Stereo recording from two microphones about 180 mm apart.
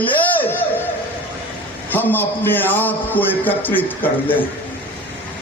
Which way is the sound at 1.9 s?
10° left (ahead or behind).